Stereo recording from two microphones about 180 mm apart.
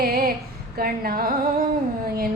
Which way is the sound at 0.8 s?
55° right (ahead or behind).